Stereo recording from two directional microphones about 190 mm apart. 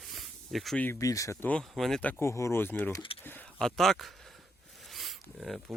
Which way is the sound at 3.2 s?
10° left (ahead or behind).